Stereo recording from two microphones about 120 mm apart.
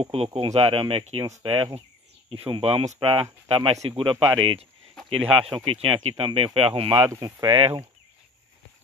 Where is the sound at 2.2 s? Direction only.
50° right (ahead or behind).